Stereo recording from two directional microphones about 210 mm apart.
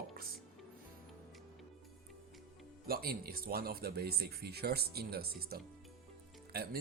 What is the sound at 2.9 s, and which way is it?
Speech, 45° right (ahead or behind).